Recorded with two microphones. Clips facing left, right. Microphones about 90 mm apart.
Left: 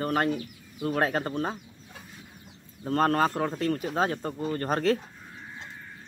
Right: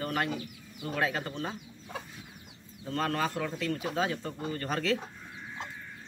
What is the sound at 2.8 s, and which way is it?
Speech, 45° left (ahead or behind).